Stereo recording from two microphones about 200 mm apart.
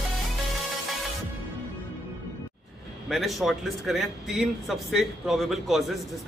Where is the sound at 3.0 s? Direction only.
Centre (ahead or behind).